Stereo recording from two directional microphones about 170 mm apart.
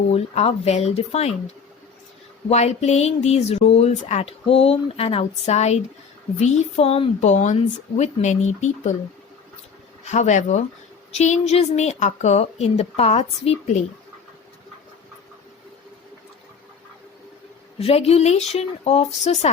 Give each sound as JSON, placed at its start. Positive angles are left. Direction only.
{"t": 0.1, "sound": "speech", "side_deg": 35}
{"t": 2.5, "sound": "a woman's voice", "side_deg": 40}
{"t": 10.1, "sound": "a woman's voice", "side_deg": 45}
{"t": 17.7, "sound": "speech", "side_deg": 35}